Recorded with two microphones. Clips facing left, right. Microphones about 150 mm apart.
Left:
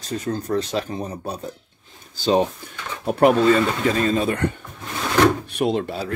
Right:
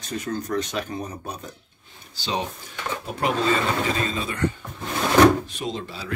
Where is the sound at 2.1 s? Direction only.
45° left (ahead or behind).